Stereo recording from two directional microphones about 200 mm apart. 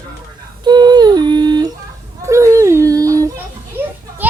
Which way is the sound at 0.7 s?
20° right (ahead or behind).